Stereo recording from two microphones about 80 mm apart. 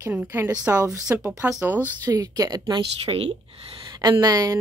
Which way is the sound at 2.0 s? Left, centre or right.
Right.